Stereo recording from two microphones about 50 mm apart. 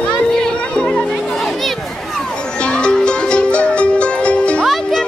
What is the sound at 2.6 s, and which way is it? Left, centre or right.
Music, left.